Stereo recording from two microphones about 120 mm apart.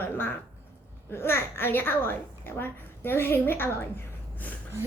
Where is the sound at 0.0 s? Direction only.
15° left (ahead or behind).